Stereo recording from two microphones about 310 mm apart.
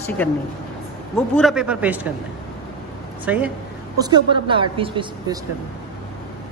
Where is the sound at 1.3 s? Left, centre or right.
Centre.